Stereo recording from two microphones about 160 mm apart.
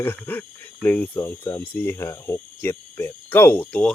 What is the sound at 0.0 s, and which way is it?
Speech, 10° left (ahead or behind).